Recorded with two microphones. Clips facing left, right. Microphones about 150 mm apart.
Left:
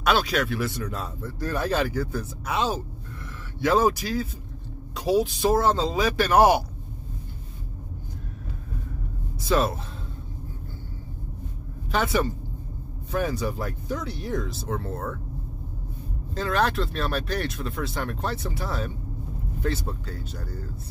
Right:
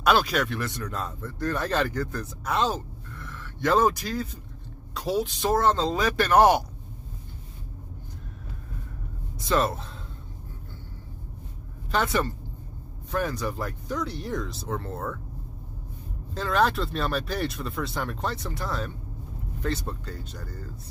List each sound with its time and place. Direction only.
0.0 s speech: centre (ahead or behind)
9.5 s speech: 5° left (ahead or behind)
11.9 s speech: 5° left (ahead or behind)
16.3 s speech: centre (ahead or behind)